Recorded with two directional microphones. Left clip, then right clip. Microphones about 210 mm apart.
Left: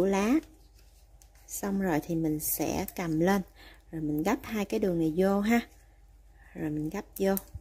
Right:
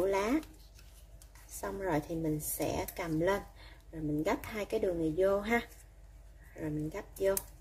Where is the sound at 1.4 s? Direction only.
45° left (ahead or behind).